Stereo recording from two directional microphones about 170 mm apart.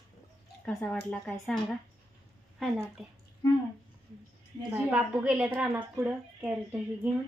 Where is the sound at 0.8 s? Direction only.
5° left (ahead or behind).